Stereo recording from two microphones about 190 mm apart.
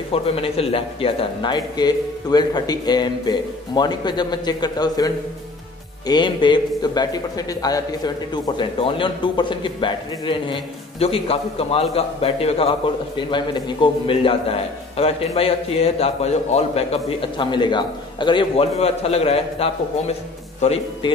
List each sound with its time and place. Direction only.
0.1 s a man's voice: 30° left (ahead or behind)